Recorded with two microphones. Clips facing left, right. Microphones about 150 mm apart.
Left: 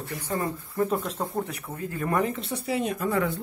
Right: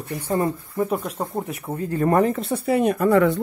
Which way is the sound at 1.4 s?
30° right (ahead or behind).